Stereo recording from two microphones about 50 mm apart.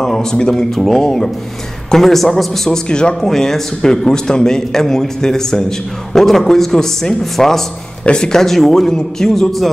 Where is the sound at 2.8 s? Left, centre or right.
Centre.